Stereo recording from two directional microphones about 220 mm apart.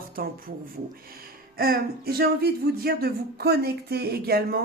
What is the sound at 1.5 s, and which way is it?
Speech, 45° right (ahead or behind).